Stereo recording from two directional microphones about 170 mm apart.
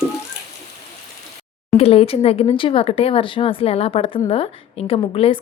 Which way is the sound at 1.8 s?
35° left (ahead or behind).